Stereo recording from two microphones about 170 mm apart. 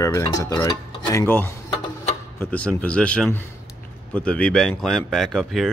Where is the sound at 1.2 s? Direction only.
10° left (ahead or behind).